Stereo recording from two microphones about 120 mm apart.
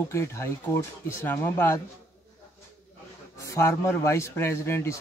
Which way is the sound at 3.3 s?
25° left (ahead or behind).